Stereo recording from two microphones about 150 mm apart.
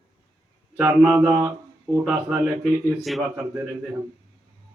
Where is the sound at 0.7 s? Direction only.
10° right (ahead or behind).